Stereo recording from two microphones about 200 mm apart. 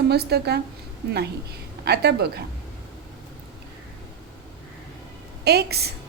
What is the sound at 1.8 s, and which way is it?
Speech, 55° right (ahead or behind).